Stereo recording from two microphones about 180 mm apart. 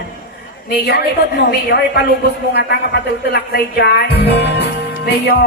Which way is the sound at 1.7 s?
65° left (ahead or behind).